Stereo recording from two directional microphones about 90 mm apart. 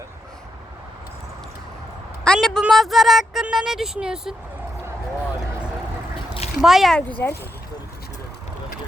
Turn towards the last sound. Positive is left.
turn(degrees=20)  # may be behind; listen again after turning